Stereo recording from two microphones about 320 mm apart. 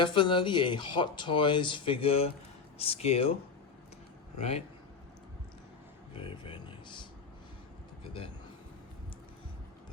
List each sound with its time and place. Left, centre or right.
0.0 s speech: centre
4.4 s speech: centre
6.1 s speech: centre